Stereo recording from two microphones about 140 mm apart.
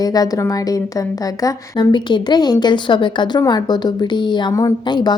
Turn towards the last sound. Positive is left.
turn(degrees=30)  # may be behind; listen again after turning